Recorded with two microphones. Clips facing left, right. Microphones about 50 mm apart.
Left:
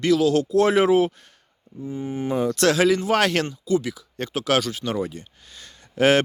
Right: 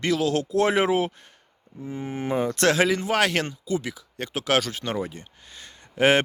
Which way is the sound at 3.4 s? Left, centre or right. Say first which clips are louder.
Left 5 dB; right.